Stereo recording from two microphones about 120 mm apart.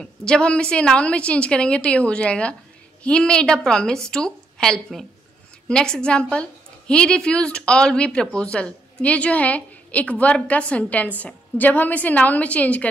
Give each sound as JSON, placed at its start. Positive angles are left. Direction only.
{"t": 0.0, "sound": "a woman's voice", "side_deg": 5}